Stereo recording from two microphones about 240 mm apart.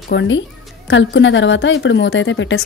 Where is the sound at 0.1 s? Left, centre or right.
Left.